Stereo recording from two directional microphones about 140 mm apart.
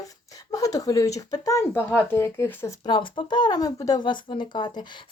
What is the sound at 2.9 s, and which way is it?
Speech, 35° left (ahead or behind).